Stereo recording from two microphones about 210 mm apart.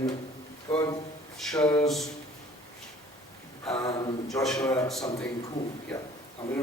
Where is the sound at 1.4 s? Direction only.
5° left (ahead or behind).